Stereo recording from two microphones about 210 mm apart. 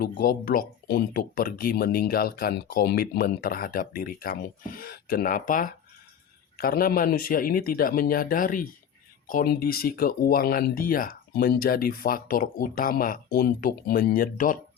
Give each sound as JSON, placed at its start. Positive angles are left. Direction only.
{"t": 0.0, "sound": "speech", "side_deg": 45}